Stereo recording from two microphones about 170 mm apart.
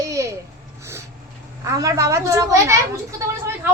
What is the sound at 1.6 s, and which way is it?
A woman's voice, 20° right (ahead or behind).